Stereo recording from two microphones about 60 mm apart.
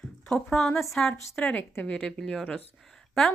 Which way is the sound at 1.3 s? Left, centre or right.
Centre.